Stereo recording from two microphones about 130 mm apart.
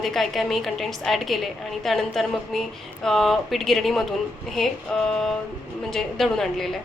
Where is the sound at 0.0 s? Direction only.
Centre (ahead or behind).